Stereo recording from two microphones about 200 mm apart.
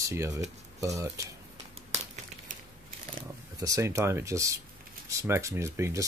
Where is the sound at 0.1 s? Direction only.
15° right (ahead or behind).